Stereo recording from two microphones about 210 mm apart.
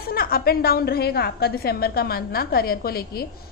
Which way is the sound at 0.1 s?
45° left (ahead or behind).